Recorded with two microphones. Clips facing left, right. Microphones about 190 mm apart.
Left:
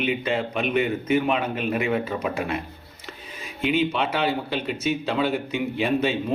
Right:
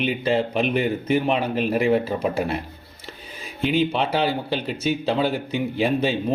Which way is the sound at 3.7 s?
30° right (ahead or behind).